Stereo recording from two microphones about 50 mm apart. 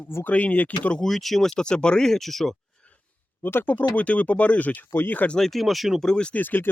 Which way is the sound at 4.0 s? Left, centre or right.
Left.